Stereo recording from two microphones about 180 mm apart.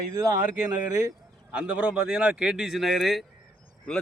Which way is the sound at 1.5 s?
5° right (ahead or behind).